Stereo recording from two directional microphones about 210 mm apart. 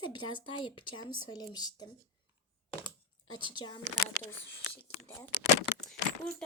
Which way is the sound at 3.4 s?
20° left (ahead or behind).